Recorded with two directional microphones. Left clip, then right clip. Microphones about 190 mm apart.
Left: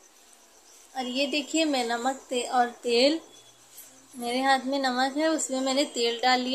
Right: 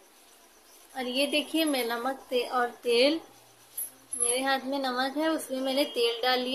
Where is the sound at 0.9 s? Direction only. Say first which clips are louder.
Even; 10° left (ahead or behind); by 3.2 s 30° left (ahead or behind).